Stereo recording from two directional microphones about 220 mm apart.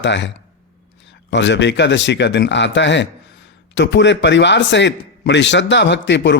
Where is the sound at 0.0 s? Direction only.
55° left (ahead or behind).